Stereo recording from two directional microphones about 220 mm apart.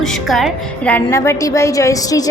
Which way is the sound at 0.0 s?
Centre (ahead or behind).